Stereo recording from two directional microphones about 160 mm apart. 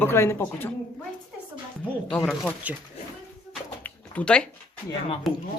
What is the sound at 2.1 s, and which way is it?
Speech, 10° left (ahead or behind).